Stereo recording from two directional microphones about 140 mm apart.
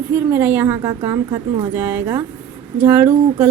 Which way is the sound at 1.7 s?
15° right (ahead or behind).